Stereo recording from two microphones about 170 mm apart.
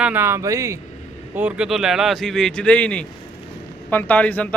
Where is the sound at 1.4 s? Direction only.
5° right (ahead or behind).